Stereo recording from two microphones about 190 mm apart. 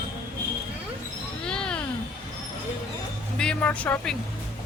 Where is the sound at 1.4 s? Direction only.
5° left (ahead or behind).